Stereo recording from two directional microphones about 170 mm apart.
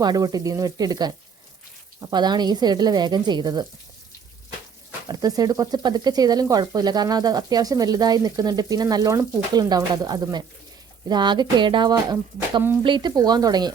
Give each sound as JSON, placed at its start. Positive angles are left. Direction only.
{"t": 0.0, "sound": "speech", "side_deg": -25}
{"t": 5.0, "sound": "speech", "side_deg": -20}